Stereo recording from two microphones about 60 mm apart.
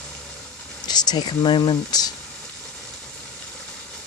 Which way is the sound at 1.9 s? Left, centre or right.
Left.